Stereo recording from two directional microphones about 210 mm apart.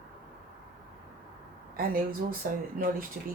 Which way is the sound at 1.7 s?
45° right (ahead or behind).